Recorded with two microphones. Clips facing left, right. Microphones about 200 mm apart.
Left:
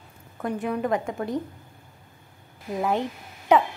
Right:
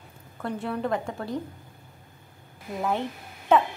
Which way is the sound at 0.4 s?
15° left (ahead or behind).